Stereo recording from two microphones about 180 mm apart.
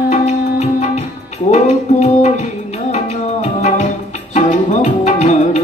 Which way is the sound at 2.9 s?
40° left (ahead or behind).